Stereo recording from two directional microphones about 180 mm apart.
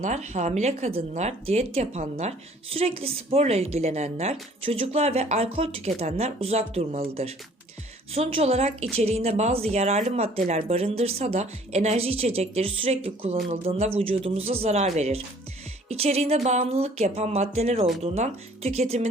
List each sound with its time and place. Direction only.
0.0 s speech: 40° right (ahead or behind)